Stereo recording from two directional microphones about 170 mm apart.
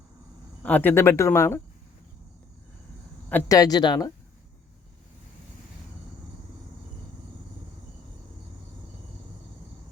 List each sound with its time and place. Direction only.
0.6 s speech: 10° left (ahead or behind)
3.5 s speech: 20° left (ahead or behind)